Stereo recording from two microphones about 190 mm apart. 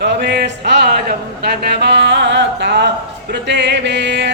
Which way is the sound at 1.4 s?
60° right (ahead or behind).